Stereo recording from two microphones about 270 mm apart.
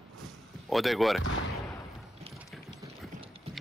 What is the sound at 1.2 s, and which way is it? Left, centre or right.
Speech, left.